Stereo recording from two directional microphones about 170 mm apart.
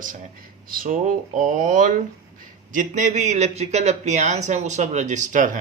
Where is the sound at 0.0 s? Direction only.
50° right (ahead or behind).